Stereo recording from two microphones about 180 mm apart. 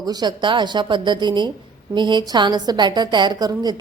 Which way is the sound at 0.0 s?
20° right (ahead or behind).